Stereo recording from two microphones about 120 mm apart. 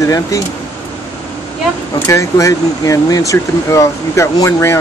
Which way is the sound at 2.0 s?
25° left (ahead or behind).